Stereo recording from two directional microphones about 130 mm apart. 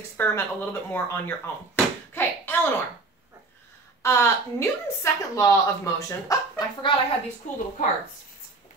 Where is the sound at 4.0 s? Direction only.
20° left (ahead or behind).